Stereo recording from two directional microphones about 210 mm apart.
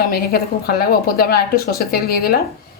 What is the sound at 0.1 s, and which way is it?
Speech, 45° left (ahead or behind).